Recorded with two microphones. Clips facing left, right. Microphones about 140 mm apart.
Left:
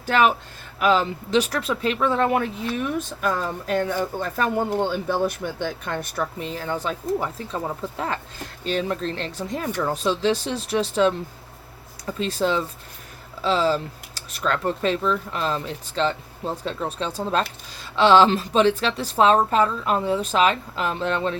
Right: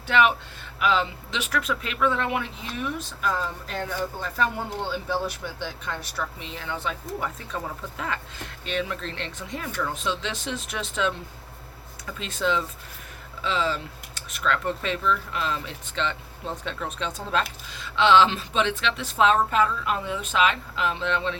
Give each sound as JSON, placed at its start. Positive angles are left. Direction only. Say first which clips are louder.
{"t": 0.1, "sound": "speech", "louder": "left 2 dB", "side_deg": 40}